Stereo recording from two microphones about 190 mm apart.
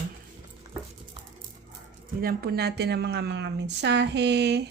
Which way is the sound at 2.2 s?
55° right (ahead or behind).